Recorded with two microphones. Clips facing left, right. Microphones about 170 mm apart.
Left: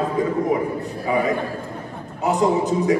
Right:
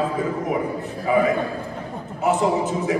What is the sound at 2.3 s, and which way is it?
Speech, 35° left (ahead or behind).